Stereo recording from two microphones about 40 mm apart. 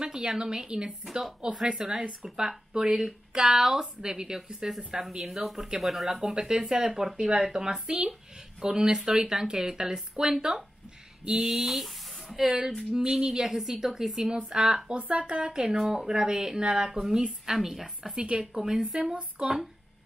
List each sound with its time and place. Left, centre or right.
0.0 s a sound: centre
0.4 s speech: centre
5.2 s speech: centre
6.2 s speech: centre
12.4 s speech: centre
15.0 s speech: right
15.8 s speech: centre
17.6 s speech: centre
18.1 s speech: right